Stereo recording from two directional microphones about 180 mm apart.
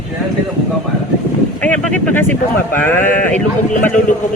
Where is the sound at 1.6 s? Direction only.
10° left (ahead or behind).